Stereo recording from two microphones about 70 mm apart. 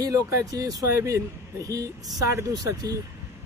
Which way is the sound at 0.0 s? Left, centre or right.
Right.